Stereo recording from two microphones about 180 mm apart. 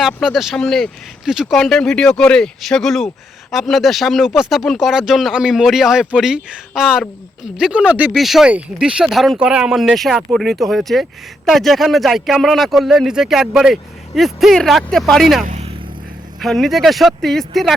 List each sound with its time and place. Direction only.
0.0 s speech: centre (ahead or behind)
15.4 s vehicle: 35° right (ahead or behind)
16.4 s speech: centre (ahead or behind)